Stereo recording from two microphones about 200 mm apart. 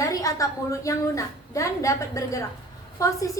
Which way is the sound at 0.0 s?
15° left (ahead or behind).